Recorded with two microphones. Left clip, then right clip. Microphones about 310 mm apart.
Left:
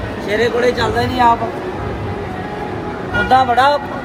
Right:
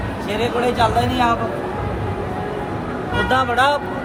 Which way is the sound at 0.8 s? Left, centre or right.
Centre.